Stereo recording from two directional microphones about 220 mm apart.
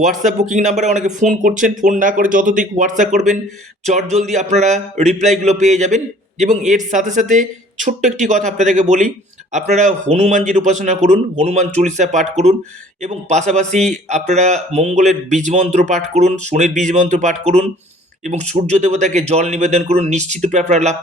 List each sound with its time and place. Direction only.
0.0 s speech: 35° right (ahead or behind)